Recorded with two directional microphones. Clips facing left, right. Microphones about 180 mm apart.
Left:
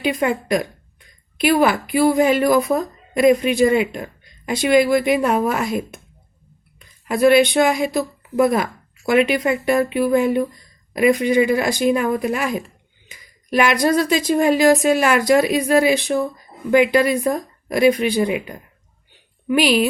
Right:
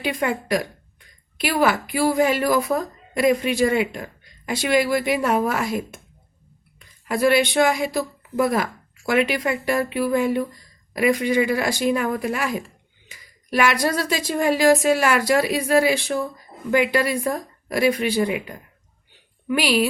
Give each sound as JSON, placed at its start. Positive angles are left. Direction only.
{"t": 0.0, "sound": "a woman's voice", "side_deg": 20}